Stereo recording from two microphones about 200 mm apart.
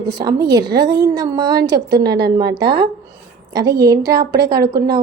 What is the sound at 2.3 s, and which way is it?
A woman's voice, 20° right (ahead or behind).